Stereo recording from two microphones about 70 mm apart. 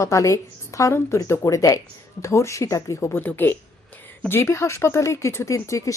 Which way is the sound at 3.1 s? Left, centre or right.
Left.